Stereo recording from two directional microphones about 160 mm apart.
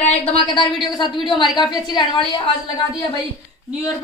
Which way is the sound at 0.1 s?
40° left (ahead or behind).